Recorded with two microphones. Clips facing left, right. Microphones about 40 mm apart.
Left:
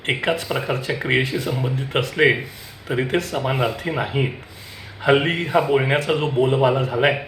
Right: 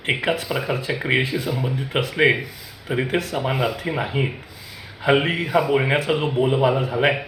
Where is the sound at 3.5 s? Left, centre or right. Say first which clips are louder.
Left 1 dB; left.